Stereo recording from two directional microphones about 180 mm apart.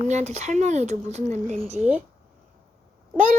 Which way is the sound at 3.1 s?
45° right (ahead or behind).